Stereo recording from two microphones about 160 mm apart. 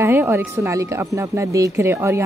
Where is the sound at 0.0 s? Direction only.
15° right (ahead or behind).